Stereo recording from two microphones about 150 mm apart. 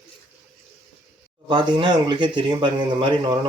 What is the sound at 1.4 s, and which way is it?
Speech, 30° right (ahead or behind).